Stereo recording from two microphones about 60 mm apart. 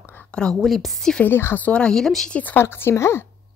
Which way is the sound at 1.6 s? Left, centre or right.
Left.